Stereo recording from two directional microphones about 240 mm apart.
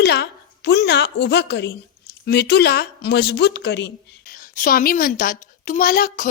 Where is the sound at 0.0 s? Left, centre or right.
Left.